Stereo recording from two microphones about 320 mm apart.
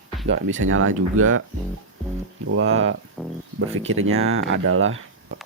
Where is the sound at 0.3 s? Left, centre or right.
Right.